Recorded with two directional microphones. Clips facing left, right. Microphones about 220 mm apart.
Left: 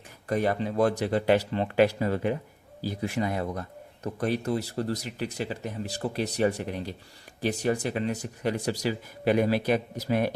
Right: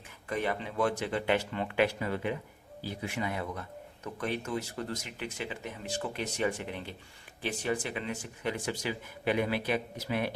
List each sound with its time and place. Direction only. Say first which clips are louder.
0.3 s speech: left 7 dB; 40° left (ahead or behind)